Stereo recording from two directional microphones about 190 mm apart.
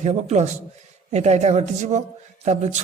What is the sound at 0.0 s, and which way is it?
A man's voice, 35° right (ahead or behind).